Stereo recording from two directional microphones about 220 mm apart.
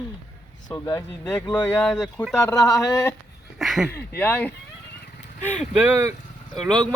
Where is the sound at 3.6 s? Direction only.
Centre (ahead or behind).